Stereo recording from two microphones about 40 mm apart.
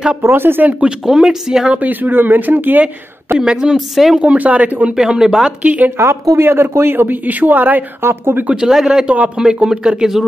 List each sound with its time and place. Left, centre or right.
0.2 s speech: right
1.0 s speech: centre
1.8 s speech: right
3.3 s a woman's voice: centre
3.7 s speech: centre
4.2 s speech: right
4.9 s speech: centre
5.6 s speech: right
5.9 s speech: right
7.2 s speech: right
8.0 s speech: right
8.5 s speech: centre